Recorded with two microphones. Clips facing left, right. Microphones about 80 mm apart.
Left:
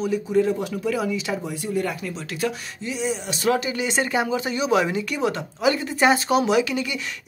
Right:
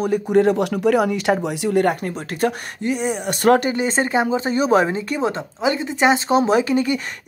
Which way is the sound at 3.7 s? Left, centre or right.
Right.